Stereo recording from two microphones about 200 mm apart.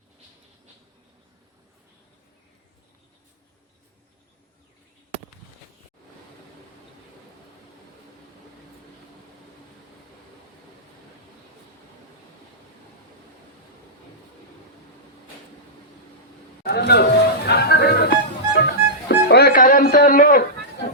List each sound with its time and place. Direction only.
16.6 s music: 55° left (ahead or behind)